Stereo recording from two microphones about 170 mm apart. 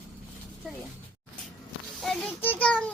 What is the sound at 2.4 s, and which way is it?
Speech, 10° left (ahead or behind).